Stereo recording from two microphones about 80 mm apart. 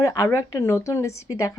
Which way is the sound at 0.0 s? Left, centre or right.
Left.